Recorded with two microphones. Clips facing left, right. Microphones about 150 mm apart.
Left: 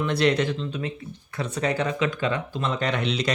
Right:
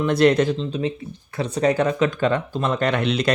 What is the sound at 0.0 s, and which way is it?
Speech, 45° right (ahead or behind).